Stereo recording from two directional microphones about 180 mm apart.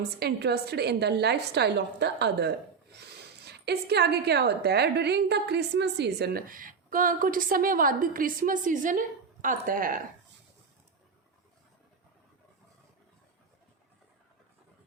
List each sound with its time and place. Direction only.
0.2 s a woman's voice: 65° right (ahead or behind)
3.7 s a woman's voice: 65° right (ahead or behind); by 10.0 s 50° right (ahead or behind)